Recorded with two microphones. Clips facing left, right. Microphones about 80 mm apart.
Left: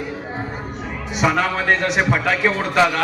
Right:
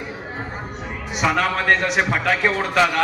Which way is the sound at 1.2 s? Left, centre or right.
Centre.